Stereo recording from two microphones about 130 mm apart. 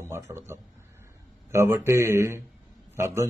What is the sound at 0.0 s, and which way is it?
A man's voice, 20° right (ahead or behind).